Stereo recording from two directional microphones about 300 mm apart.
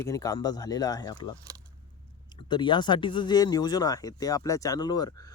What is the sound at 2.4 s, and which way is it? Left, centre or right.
Speech, centre.